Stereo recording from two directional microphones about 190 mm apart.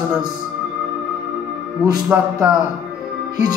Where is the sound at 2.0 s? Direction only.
5° right (ahead or behind).